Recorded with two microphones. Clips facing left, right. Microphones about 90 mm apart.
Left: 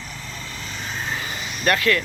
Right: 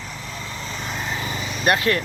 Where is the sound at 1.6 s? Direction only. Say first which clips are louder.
Even; 25° right (ahead or behind).